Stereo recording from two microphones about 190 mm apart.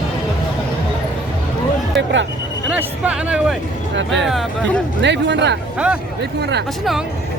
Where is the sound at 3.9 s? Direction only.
70° right (ahead or behind).